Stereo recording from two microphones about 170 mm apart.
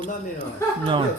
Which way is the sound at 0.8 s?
30° right (ahead or behind).